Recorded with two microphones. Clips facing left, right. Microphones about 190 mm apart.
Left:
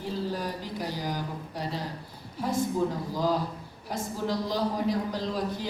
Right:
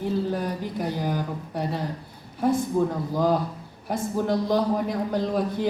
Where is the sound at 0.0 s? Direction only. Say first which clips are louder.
Right 6 dB; 55° right (ahead or behind).